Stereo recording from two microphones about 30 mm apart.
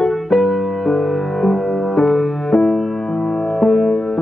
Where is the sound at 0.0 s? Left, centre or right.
Centre.